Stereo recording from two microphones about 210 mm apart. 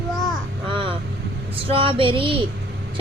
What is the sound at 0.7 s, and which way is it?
Vehicle, 25° right (ahead or behind).